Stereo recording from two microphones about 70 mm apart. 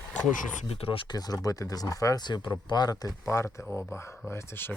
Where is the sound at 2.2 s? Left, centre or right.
Left.